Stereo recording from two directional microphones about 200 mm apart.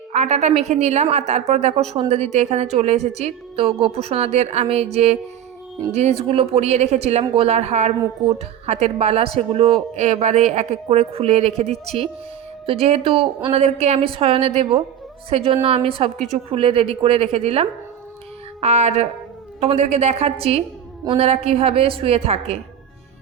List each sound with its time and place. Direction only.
0.1 s speech: 35° right (ahead or behind)